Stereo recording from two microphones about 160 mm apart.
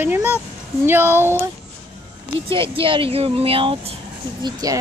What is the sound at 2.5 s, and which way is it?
Speech, 35° right (ahead or behind).